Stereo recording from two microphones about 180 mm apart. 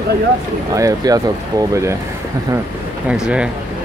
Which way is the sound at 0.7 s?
20° right (ahead or behind).